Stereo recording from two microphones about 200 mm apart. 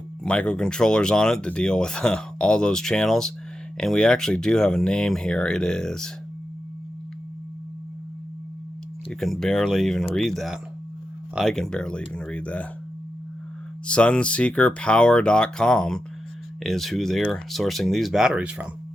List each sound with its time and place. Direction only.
0.3 s speech: 5° left (ahead or behind)
9.2 s speech: centre (ahead or behind)
13.8 s speech: 5° left (ahead or behind)